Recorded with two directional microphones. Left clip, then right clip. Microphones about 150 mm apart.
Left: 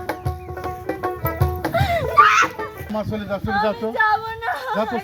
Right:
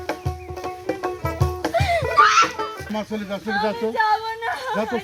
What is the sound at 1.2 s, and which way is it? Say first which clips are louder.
Music: left 2 dB; 15° right (ahead or behind).